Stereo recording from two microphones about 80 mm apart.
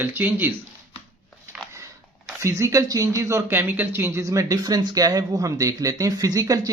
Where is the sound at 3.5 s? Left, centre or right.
Right.